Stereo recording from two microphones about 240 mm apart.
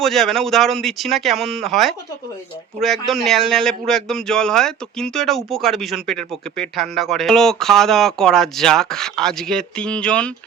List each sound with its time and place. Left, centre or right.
0.0 s speech: centre